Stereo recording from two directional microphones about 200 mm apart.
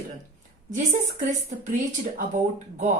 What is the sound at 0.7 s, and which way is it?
A woman's voice, 40° right (ahead or behind).